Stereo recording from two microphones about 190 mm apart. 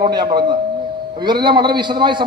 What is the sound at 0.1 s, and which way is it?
A man's voice, 25° right (ahead or behind).